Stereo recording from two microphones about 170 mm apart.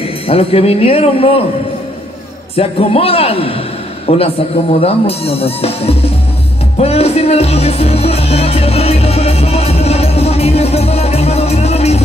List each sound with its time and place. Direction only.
0.3 s speech: 35° left (ahead or behind)
2.5 s speech: 35° left (ahead or behind)
6.8 s music: 35° left (ahead or behind)